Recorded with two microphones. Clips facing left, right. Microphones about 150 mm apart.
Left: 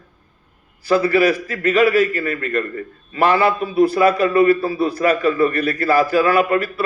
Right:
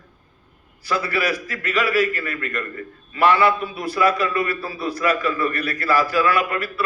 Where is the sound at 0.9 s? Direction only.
30° left (ahead or behind).